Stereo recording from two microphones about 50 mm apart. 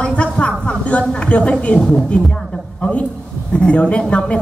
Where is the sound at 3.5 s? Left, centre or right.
Left.